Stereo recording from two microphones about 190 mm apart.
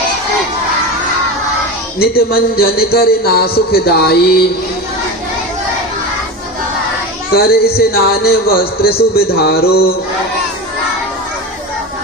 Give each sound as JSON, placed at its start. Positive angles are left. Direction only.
{"t": 2.0, "sound": "a man's voice", "side_deg": 55}
{"t": 7.3, "sound": "a man's voice", "side_deg": 55}